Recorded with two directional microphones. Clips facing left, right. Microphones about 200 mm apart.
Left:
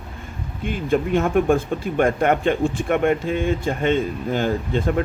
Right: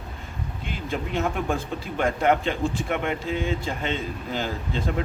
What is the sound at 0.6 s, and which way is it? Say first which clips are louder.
Speech: left 10 dB; 50° left (ahead or behind).